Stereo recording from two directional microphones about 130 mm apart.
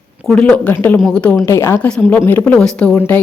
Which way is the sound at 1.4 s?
20° left (ahead or behind).